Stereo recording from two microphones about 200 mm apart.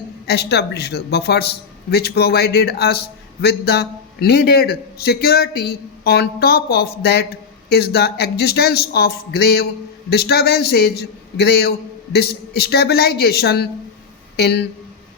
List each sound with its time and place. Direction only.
0.3 s a man's voice: 55° left (ahead or behind)